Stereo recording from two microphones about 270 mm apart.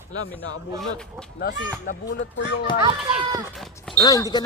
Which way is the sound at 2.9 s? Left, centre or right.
Centre.